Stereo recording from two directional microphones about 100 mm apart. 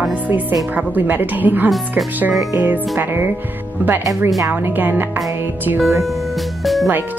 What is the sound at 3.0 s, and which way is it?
Speech, 20° right (ahead or behind).